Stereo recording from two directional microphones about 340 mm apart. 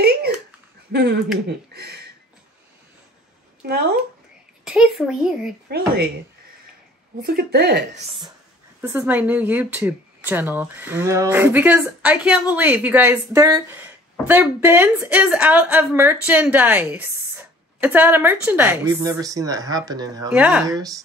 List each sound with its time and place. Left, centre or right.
0.0 s a sound: right
0.9 s speech: right
3.6 s speech: right
4.6 s a woman's voice: centre
5.7 s speech: right
7.2 s speech: right
8.8 s a woman's voice: centre